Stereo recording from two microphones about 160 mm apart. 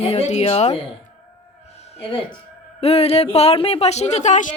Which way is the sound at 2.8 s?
40° left (ahead or behind).